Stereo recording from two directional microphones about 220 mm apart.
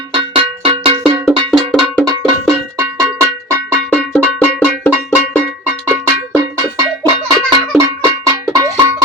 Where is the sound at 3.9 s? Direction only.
5° left (ahead or behind).